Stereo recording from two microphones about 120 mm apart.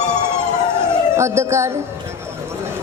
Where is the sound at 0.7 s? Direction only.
20° right (ahead or behind).